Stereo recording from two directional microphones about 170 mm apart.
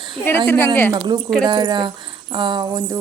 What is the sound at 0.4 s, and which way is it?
Speech, 10° left (ahead or behind).